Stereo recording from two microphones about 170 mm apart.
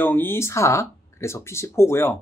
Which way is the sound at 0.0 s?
10° left (ahead or behind).